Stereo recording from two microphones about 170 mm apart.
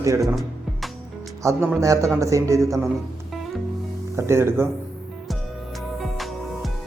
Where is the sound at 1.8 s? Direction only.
20° right (ahead or behind).